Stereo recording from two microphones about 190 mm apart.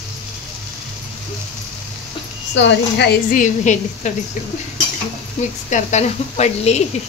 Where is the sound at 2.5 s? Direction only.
70° left (ahead or behind).